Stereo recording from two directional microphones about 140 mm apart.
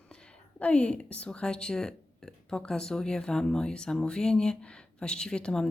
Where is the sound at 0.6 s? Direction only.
10° left (ahead or behind).